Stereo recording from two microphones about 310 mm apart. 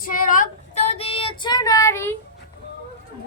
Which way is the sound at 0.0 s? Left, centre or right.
Left.